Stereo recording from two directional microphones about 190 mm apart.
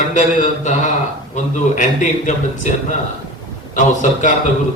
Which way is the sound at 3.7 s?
40° left (ahead or behind).